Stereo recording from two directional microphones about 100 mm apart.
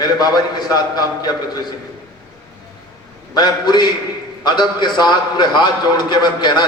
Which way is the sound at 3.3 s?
45° left (ahead or behind).